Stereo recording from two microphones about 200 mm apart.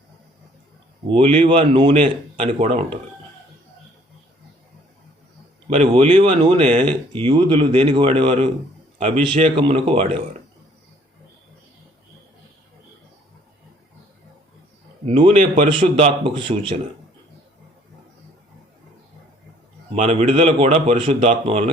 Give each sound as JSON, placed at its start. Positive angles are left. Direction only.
{"t": 1.0, "sound": "a man's voice", "side_deg": -25}
{"t": 5.6, "sound": "a man's voice", "side_deg": -35}
{"t": 15.0, "sound": "speech", "side_deg": -25}
{"t": 19.9, "sound": "a man's voice", "side_deg": -35}